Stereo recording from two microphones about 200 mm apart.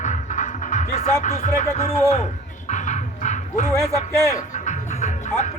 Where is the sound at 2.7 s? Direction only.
35° left (ahead or behind).